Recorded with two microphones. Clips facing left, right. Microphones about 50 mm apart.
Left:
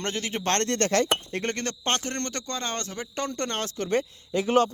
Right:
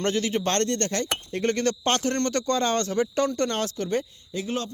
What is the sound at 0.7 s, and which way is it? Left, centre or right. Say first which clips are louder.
Speech: left 3 dB; left.